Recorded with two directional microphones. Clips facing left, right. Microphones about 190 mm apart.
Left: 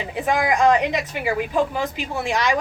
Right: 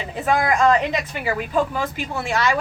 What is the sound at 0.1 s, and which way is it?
A woman's voice, 15° left (ahead or behind).